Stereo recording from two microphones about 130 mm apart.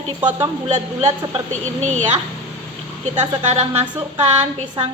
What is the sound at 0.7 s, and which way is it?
A woman's voice, 50° right (ahead or behind).